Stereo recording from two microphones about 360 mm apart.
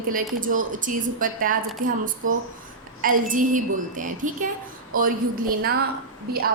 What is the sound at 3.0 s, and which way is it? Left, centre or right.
Speech, right.